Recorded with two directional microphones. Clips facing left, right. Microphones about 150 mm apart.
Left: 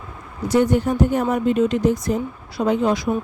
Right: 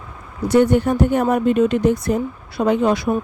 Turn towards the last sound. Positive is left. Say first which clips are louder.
# right 2 dB
turn(degrees=-65)  # may be behind; listen again after turning